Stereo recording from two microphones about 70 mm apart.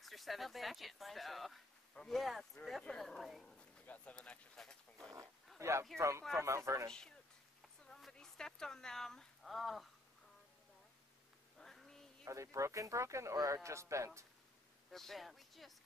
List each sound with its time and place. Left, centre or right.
0.0 s speech: centre
3.8 s speech: centre
4.6 s a sound: centre
5.6 s speech: right
6.9 s speech: centre
11.5 s a sound: centre
12.3 s speech: right
14.9 s speech: centre